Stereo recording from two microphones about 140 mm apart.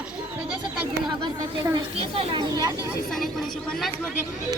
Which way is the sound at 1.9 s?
35° right (ahead or behind).